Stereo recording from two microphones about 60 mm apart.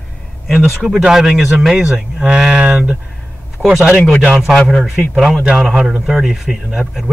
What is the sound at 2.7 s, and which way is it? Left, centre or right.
Speech, right.